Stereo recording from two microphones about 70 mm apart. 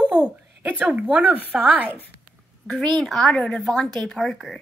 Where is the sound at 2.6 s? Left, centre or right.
Centre.